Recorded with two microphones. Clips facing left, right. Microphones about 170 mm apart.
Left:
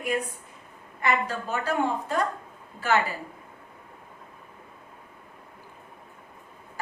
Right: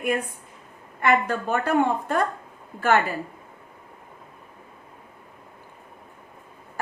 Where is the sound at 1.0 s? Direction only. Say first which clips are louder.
Right 5 dB; 55° right (ahead or behind).